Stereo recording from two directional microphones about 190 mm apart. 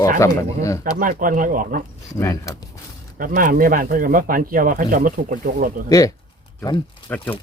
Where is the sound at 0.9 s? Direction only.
45° right (ahead or behind).